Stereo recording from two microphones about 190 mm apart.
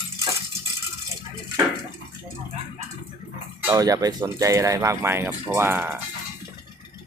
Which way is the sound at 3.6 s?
15° right (ahead or behind).